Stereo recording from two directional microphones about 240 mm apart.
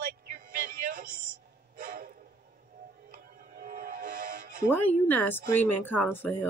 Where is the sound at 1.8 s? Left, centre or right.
Right.